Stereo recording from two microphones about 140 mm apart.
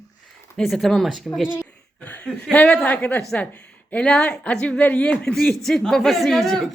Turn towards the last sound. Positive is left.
turn(degrees=0)  # may be behind; listen again after turning